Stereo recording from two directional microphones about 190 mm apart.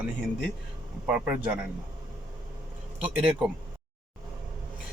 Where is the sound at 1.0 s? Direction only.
10° right (ahead or behind).